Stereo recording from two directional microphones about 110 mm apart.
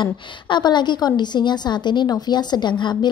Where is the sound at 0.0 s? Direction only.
45° left (ahead or behind).